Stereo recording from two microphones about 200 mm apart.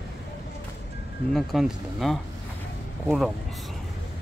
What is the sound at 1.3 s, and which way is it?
Speech, centre (ahead or behind).